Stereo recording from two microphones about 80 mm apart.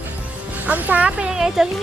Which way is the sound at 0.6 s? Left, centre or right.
Centre.